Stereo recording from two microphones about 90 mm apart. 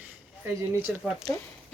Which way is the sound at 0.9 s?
5° right (ahead or behind).